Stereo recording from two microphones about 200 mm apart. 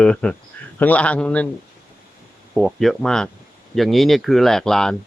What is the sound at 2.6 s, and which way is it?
Speech, centre (ahead or behind).